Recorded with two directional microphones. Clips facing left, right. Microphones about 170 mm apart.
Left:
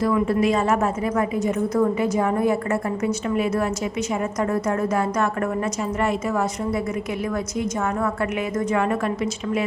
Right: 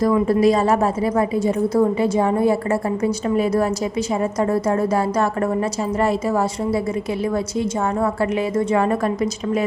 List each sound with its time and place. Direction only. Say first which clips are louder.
0.1 s a woman's voice: right 4 dB; 35° right (ahead or behind)
8.0 s a woman's voice: right 4 dB; 30° right (ahead or behind)